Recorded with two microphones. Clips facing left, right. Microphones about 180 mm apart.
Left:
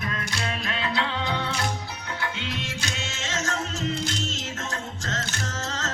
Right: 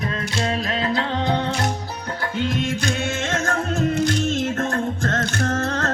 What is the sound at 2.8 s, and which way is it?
Music, 55° right (ahead or behind).